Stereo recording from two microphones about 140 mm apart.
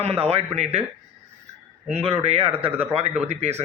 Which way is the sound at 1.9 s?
45° right (ahead or behind).